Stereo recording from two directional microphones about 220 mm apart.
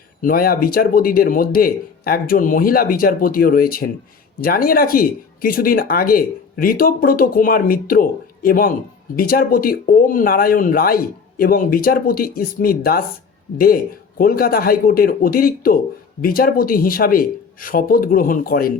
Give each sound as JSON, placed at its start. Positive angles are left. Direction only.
{"t": 0.2, "sound": "speech", "side_deg": 40}
{"t": 14.2, "sound": "speech", "side_deg": 40}